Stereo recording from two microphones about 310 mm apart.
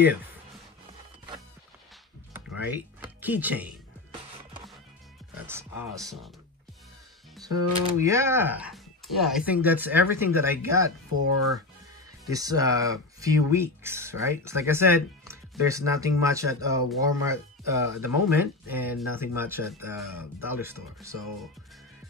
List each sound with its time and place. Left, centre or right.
2.3 s a sound: centre
5.5 s speech: centre
7.4 s speech: centre
11.1 s speech: left
12.3 s speech: centre